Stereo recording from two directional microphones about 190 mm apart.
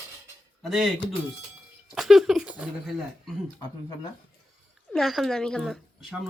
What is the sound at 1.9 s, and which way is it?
Speech, centre (ahead or behind).